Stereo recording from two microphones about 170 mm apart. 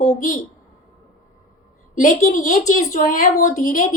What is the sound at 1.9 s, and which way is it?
A woman's voice, 45° left (ahead or behind).